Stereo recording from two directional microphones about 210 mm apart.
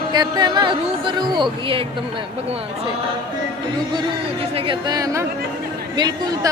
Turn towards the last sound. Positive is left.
turn(degrees=-20)  # may be behind; listen again after turning